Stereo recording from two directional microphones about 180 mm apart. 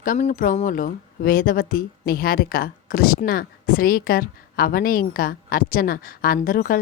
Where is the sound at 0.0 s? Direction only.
45° left (ahead or behind).